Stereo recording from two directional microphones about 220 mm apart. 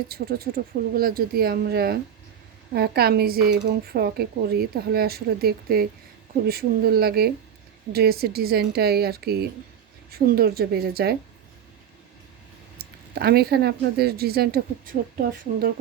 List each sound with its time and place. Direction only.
0.1 s speech: 45° right (ahead or behind)
12.8 s speech: 45° right (ahead or behind)